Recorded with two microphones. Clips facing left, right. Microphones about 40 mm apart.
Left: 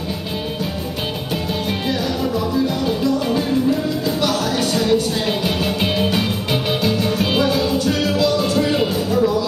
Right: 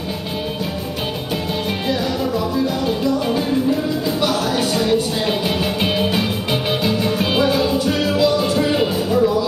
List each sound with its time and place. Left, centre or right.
2.5 s music: centre